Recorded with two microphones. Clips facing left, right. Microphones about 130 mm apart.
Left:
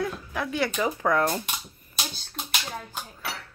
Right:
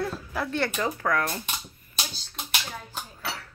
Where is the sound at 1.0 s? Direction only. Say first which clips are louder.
Left 5 dB; 25° left (ahead or behind).